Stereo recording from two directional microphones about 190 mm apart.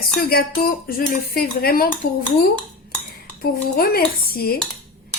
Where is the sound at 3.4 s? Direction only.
55° left (ahead or behind).